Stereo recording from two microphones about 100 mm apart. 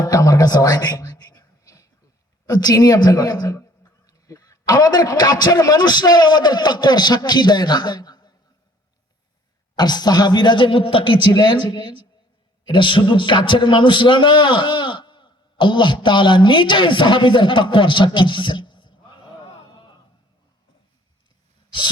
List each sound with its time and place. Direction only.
0.0 s music: 35° left (ahead or behind)
2.5 s a man's voice: 40° left (ahead or behind)
9.7 s a man's voice: 45° left (ahead or behind)